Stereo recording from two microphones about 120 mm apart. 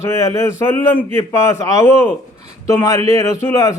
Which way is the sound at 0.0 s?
25° left (ahead or behind).